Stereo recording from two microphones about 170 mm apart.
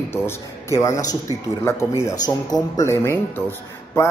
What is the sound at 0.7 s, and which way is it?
A man's voice, 20° left (ahead or behind).